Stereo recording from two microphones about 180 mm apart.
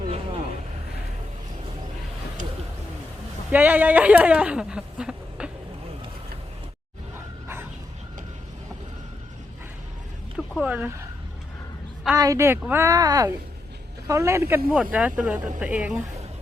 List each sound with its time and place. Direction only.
3.5 s speech: 10° right (ahead or behind)
10.3 s a sound: 5° right (ahead or behind)
12.1 s speech: 15° right (ahead or behind)